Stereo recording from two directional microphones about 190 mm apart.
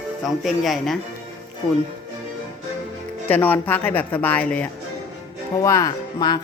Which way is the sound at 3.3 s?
10° left (ahead or behind).